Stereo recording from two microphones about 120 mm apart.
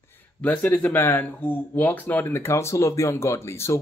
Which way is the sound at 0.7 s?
15° left (ahead or behind).